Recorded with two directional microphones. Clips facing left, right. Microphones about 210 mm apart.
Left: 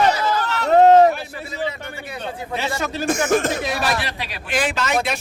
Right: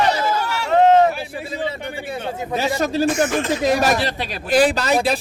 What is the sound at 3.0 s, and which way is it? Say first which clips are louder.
Speech: even; 45° left (ahead or behind).